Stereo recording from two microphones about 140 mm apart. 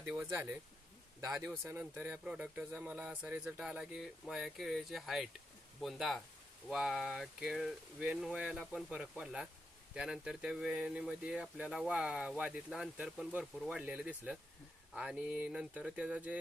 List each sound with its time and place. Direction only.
0.0 s speech: 15° right (ahead or behind)